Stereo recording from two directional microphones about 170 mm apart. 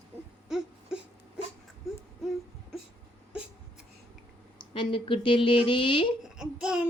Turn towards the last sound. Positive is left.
turn(degrees=-5)  # may be behind; listen again after turning